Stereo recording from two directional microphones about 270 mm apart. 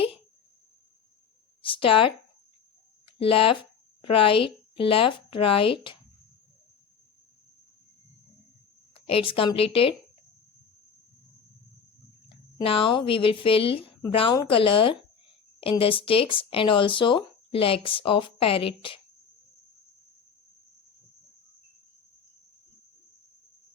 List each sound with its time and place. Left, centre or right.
1.6 s speech: centre
3.2 s a woman's voice: centre
9.0 s speech: left
12.6 s speech: centre